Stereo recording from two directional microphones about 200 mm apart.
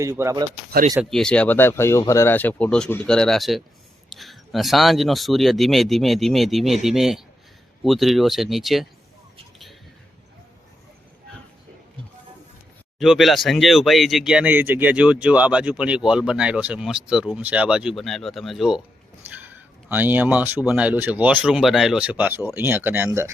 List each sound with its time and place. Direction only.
0.0 s speech: 15° right (ahead or behind)
0.7 s speech: 40° right (ahead or behind)
1.1 s speech: 5° left (ahead or behind)
13.0 s speech: centre (ahead or behind)